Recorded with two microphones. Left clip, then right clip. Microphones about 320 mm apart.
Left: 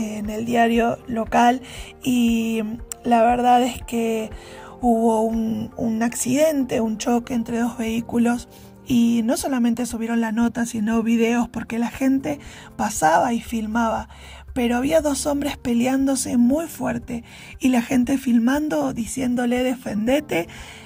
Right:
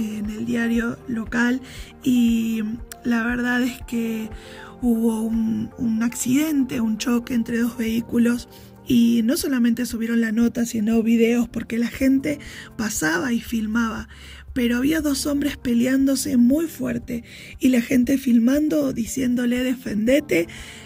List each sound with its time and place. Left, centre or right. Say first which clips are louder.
0.0 s a sound: left 2 dB; centre
2.0 s music: even; centre
5.3 s speech: even; centre
13.4 s speech: left 2 dB; centre